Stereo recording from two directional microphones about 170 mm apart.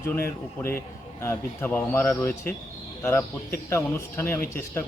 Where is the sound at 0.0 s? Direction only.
15° left (ahead or behind).